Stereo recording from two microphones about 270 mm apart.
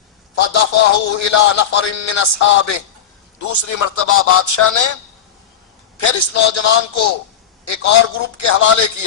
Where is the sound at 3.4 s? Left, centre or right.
Left.